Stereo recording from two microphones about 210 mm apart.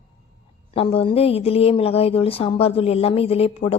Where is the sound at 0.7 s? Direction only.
25° left (ahead or behind).